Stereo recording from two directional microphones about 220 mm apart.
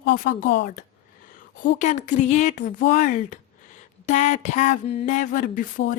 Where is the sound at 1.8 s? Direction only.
35° left (ahead or behind).